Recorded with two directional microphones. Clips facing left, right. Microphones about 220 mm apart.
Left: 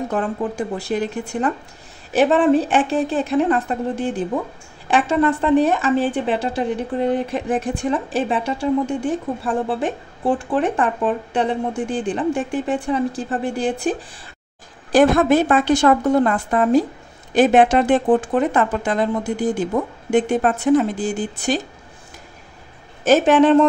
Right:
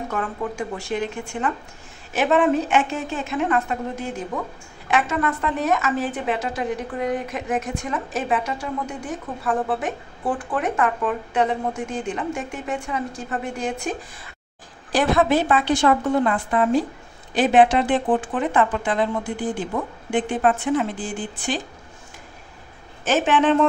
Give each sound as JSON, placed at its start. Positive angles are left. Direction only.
{"t": 0.1, "sound": "a woman's voice", "side_deg": 35}
{"t": 14.9, "sound": "a woman's voice", "side_deg": 45}
{"t": 23.0, "sound": "a woman's voice", "side_deg": 40}